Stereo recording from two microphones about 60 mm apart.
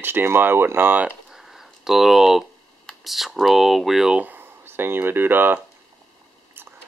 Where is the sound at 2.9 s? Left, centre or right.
Centre.